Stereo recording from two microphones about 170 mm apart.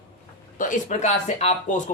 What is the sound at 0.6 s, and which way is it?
Speech, 50° left (ahead or behind).